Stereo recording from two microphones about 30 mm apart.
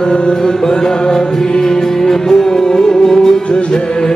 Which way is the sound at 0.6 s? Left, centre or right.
Centre.